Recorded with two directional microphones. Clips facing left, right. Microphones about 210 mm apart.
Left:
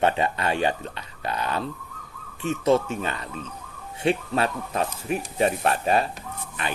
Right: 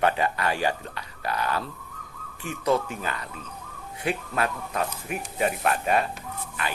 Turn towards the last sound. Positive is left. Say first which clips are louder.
# left 1 dB
turn(degrees=25)  # may be behind; listen again after turning